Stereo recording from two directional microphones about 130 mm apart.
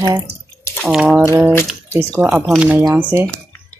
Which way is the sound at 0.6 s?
15° left (ahead or behind).